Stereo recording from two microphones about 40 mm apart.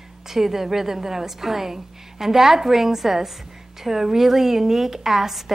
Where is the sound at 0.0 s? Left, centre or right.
Centre.